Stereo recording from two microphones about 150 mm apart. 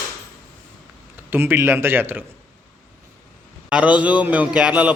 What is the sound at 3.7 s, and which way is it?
A man's voice, 5° right (ahead or behind).